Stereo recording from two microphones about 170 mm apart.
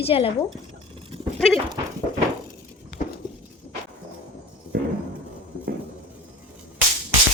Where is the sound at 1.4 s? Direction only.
5° left (ahead or behind).